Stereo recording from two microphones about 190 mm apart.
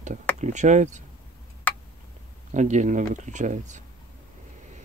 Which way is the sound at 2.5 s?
40° right (ahead or behind).